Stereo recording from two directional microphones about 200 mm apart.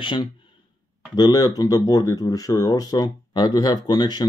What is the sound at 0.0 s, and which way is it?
Speech, 25° left (ahead or behind).